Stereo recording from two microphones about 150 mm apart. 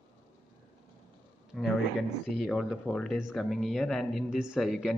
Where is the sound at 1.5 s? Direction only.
5° left (ahead or behind).